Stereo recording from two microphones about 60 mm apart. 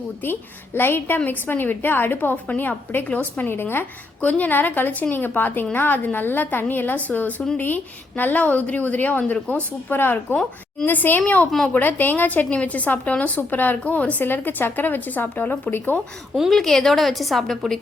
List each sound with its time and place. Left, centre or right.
0.2 s a woman's voice: left
3.5 s a woman's voice: left
4.2 s a woman's voice: left
9.9 s a woman's voice: left
16.5 s a woman's voice: centre